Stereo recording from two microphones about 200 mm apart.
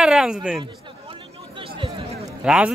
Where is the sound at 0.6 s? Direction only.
25° right (ahead or behind).